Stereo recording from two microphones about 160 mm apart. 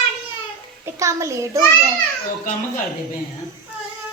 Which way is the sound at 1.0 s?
20° right (ahead or behind).